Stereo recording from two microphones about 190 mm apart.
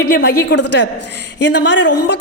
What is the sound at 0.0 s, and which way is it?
A woman's voice, 55° left (ahead or behind).